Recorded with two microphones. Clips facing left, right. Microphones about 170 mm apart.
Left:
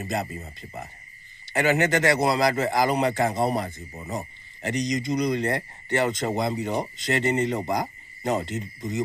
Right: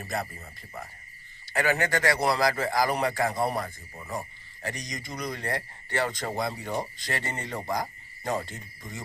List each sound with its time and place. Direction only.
0.0 s speech: 20° left (ahead or behind)